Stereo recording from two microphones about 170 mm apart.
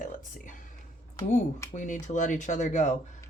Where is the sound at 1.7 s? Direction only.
45° left (ahead or behind).